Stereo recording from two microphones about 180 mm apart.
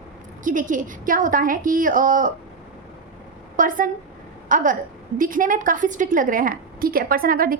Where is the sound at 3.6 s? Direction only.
50° right (ahead or behind).